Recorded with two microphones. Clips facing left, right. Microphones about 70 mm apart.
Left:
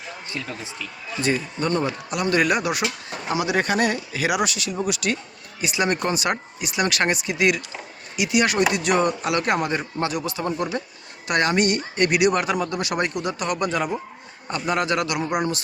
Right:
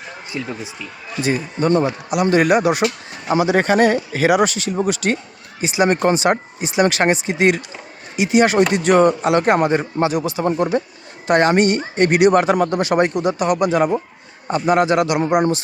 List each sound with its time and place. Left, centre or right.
0.3 s speech: centre